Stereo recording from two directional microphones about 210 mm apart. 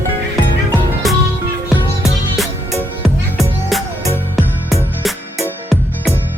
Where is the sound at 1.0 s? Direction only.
Centre (ahead or behind).